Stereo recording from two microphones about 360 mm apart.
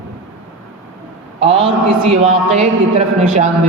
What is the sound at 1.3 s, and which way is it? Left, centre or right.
Speech, centre.